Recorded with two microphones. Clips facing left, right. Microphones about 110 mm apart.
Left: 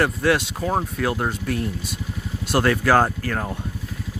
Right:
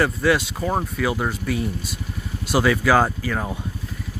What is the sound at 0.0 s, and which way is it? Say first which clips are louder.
Speech: even; centre (ahead or behind).